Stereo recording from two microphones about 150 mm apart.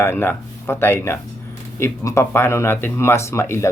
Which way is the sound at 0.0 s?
15° left (ahead or behind).